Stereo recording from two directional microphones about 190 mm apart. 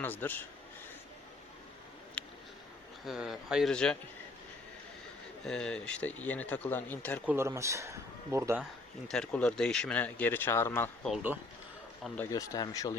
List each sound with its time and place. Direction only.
0.0 s speech: 10° left (ahead or behind)
2.2 s a sound: 5° left (ahead or behind)
3.1 s speech: centre (ahead or behind)
5.5 s speech: 5° left (ahead or behind)
7.3 s speech: 15° right (ahead or behind)
9.0 s speech: 5° left (ahead or behind)
12.0 s speech: 10° left (ahead or behind)
12.3 s speech: 20° left (ahead or behind)